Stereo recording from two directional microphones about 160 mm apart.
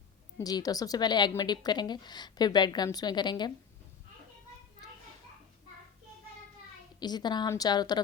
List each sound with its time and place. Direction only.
0.3 s a woman's voice: 25° left (ahead or behind)
7.0 s a woman's voice: 25° left (ahead or behind)